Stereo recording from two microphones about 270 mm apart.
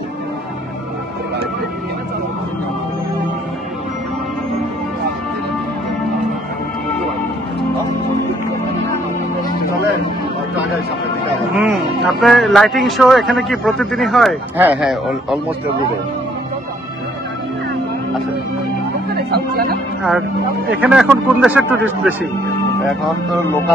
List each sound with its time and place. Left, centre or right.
11.5 s speech: centre
19.3 s speech: right
20.0 s speech: centre